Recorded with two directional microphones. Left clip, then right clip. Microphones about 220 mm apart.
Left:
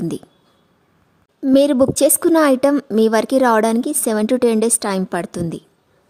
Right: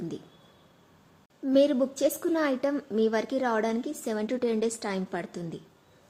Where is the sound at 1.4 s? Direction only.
45° left (ahead or behind).